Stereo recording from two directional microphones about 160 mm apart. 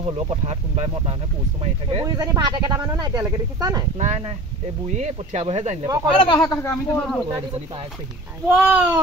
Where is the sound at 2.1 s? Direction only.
25° right (ahead or behind).